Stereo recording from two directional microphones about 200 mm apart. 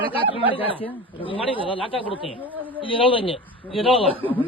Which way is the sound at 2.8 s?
25° left (ahead or behind).